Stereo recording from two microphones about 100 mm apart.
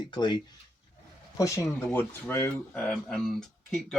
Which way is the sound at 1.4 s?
35° left (ahead or behind).